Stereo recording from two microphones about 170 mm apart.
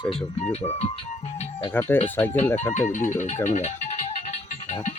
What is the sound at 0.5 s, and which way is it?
Speech, 40° left (ahead or behind).